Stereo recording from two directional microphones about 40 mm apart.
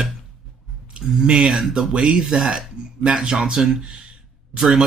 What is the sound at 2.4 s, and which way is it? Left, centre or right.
Speech, centre.